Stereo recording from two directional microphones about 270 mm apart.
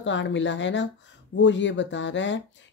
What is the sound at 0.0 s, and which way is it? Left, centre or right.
Speech, left.